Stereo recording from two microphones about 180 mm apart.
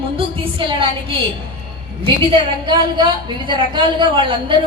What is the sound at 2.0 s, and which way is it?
A woman's voice, 30° right (ahead or behind).